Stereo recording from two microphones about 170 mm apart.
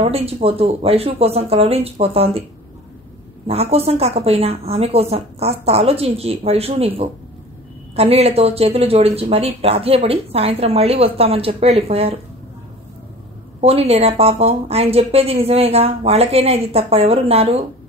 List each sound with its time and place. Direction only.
0.0 s speech: 35° right (ahead or behind)
3.4 s speech: 35° right (ahead or behind)
7.9 s speech: 35° right (ahead or behind)
13.6 s speech: 35° right (ahead or behind)